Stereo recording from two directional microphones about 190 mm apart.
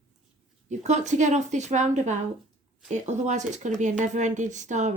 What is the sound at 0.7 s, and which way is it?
Speech, 40° right (ahead or behind).